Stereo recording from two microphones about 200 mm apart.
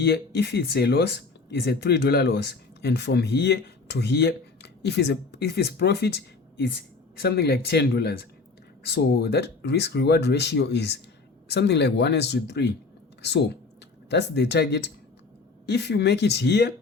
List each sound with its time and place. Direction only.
0.0 s speech: 55° left (ahead or behind)